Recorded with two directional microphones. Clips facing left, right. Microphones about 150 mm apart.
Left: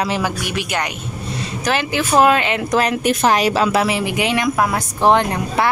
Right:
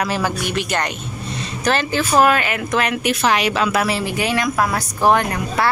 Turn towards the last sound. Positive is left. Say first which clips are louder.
# left 2 dB
turn(degrees=25)  # may be behind; listen again after turning